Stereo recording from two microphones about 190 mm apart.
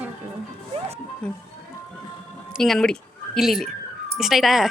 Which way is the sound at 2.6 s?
Centre (ahead or behind).